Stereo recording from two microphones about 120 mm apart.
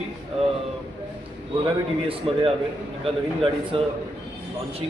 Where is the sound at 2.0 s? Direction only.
50° right (ahead or behind).